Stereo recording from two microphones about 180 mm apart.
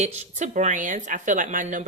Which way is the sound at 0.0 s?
40° right (ahead or behind).